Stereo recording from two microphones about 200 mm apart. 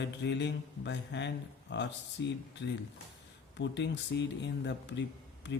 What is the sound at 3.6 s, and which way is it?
Speech, 60° left (ahead or behind).